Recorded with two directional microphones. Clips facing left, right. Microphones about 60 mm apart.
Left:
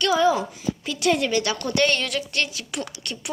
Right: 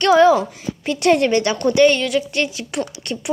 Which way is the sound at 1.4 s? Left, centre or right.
Right.